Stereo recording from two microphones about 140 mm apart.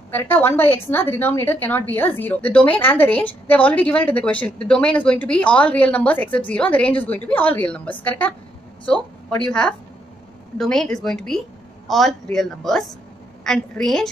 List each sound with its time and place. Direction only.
0.1 s a woman's voice: 15° left (ahead or behind)